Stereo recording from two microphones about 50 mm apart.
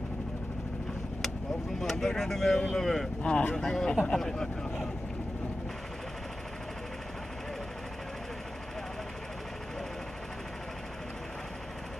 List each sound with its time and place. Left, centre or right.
1.8 s speech: centre
3.2 s speech: centre